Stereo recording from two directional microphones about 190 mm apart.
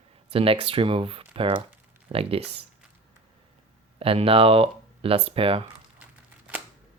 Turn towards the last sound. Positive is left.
turn(degrees=-30)  # may be behind; listen again after turning